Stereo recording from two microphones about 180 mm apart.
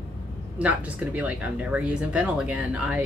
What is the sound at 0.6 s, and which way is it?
Speech, 10° right (ahead or behind).